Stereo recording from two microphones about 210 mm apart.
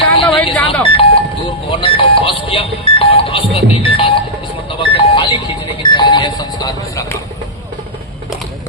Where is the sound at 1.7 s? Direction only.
25° left (ahead or behind).